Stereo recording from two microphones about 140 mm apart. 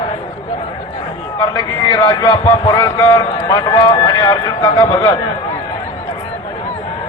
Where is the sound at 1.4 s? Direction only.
35° left (ahead or behind).